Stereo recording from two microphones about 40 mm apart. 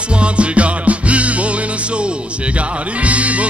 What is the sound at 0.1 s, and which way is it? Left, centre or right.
Music, right.